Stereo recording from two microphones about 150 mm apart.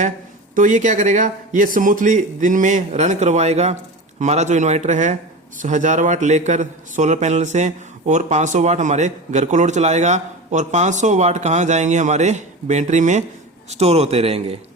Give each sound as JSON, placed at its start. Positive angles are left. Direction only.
{"t": 0.5, "sound": "a man's voice", "side_deg": -60}